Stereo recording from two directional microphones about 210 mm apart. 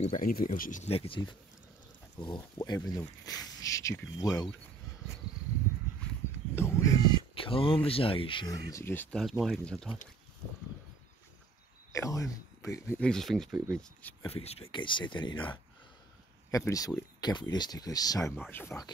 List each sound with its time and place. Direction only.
0.0 s speech: 40° left (ahead or behind); by 4.5 s 20° left (ahead or behind)
6.5 s crow: 10° left (ahead or behind)
7.3 s speech: 25° left (ahead or behind)
8.6 s speech: 15° left (ahead or behind)
11.9 s speech: 15° left (ahead or behind)
14.3 s speech: 30° left (ahead or behind); by 18.9 s 10° left (ahead or behind)